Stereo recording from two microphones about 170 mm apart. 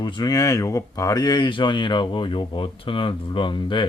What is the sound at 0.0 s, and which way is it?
Speech, 25° left (ahead or behind).